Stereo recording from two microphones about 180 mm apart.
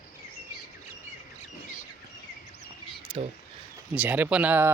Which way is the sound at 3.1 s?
30° right (ahead or behind).